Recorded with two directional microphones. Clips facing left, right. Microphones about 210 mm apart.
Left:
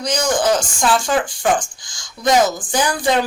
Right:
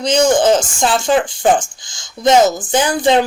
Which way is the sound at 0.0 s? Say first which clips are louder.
Right 6 dB; 25° right (ahead or behind).